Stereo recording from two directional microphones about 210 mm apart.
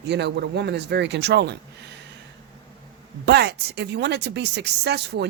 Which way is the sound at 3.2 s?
50° right (ahead or behind).